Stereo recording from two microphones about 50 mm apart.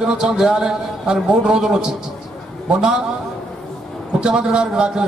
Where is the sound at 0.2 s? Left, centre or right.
Centre.